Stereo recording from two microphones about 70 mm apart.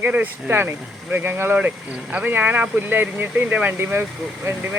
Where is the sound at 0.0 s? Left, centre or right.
Right.